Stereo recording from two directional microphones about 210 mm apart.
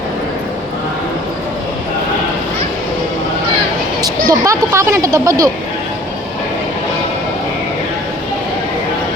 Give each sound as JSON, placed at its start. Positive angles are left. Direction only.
{"t": 4.0, "sound": "speech", "side_deg": -15}